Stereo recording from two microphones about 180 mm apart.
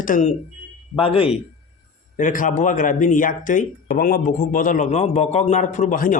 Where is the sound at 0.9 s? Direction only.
30° left (ahead or behind).